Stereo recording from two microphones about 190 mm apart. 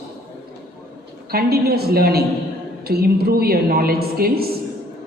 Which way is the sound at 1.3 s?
55° right (ahead or behind).